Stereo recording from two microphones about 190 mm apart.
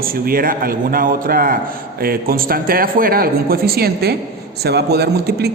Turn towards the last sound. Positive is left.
turn(degrees=-60)  # may be behind; listen again after turning